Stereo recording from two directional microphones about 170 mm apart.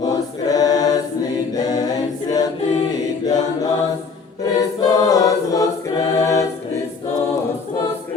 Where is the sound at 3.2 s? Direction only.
20° left (ahead or behind).